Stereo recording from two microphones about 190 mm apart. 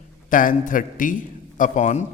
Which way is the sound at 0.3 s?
45° left (ahead or behind).